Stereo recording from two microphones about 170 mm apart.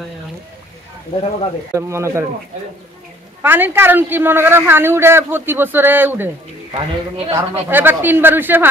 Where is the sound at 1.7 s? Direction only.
15° right (ahead or behind).